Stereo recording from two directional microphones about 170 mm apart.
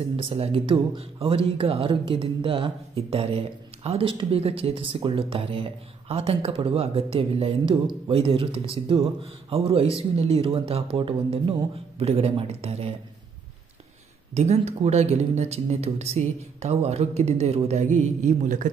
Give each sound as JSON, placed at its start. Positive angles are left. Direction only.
{"t": 0.1, "sound": "speech", "side_deg": -35}
{"t": 14.3, "sound": "speech", "side_deg": -40}